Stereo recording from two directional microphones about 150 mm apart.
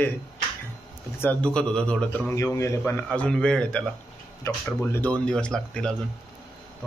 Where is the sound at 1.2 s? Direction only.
10° left (ahead or behind).